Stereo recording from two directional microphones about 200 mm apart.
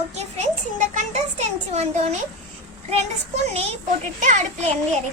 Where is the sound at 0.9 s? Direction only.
35° right (ahead or behind).